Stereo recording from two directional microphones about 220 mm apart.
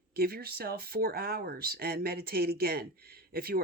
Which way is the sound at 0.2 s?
45° right (ahead or behind).